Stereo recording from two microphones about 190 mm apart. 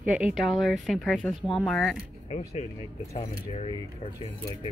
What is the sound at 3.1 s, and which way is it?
Speech, 35° left (ahead or behind).